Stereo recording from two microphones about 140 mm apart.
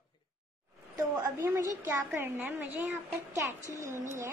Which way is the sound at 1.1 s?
20° right (ahead or behind).